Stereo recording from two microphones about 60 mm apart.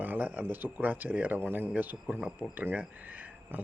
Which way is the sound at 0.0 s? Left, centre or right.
Right.